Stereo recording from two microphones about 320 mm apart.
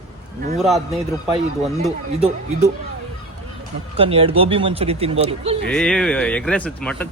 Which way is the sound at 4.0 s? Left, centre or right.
Centre.